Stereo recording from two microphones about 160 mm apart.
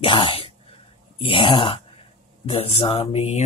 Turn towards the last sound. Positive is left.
turn(degrees=40)  # may be behind; listen again after turning